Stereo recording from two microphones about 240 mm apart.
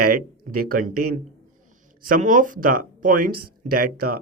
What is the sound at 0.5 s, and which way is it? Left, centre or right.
Speech, right.